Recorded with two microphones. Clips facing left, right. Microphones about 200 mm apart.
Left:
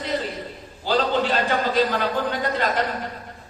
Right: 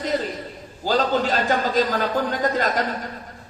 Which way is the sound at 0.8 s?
45° right (ahead or behind).